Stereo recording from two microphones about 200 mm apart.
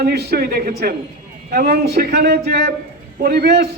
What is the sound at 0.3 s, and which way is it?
A man's voice, 50° right (ahead or behind).